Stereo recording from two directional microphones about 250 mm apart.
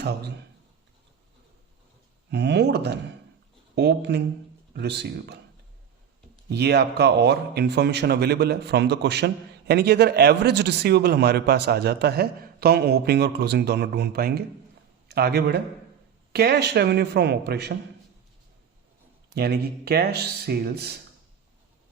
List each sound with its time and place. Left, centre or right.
0.0 s speech: right
2.3 s speech: right
6.5 s speech: right
19.3 s speech: right